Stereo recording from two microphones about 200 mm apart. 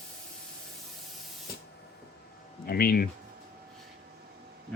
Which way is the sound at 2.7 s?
50° left (ahead or behind).